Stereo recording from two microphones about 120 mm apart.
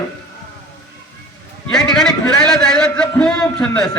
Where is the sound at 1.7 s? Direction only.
5° left (ahead or behind).